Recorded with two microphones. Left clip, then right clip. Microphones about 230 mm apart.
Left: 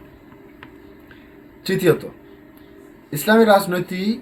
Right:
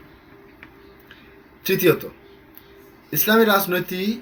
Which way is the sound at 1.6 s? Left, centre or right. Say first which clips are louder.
Right 1 dB; centre.